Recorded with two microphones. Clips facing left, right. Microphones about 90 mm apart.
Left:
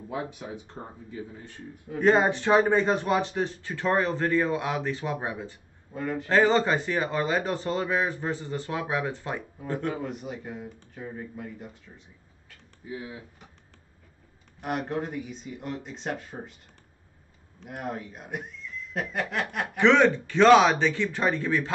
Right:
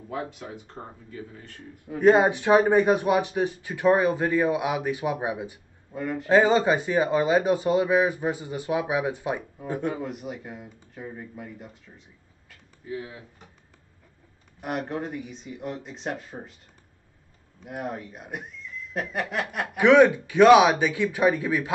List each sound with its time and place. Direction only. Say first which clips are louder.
0.1 s speech: right 1 dB; 20° left (ahead or behind)
0.8 s speech: even; 5° right (ahead or behind)
1.1 s speech: left 2 dB; 20° left (ahead or behind)
1.9 s speech: right 3 dB; 15° right (ahead or behind)
5.9 s speech: right 1 dB; 5° right (ahead or behind)
6.3 s speech: right 3 dB; 15° right (ahead or behind)
14.6 s speech: even; centre (ahead or behind)
17.6 s speech: right 1 dB; 5° right (ahead or behind)